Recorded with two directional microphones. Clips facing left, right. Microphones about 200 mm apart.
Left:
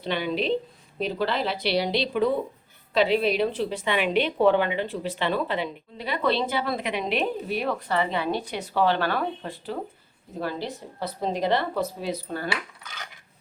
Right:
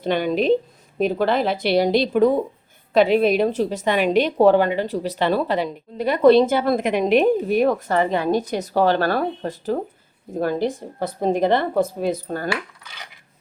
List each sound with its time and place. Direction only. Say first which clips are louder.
0.0 s a woman's voice: right 7 dB; 45° right (ahead or behind)